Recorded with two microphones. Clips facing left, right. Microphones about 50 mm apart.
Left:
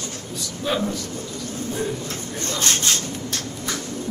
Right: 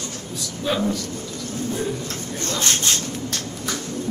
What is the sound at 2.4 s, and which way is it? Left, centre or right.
Speech, left.